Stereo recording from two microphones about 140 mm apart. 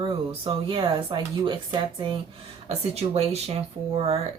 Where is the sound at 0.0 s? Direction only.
40° right (ahead or behind).